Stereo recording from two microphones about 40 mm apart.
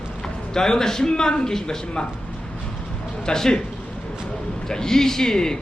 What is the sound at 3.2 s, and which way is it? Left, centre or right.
Speech, centre.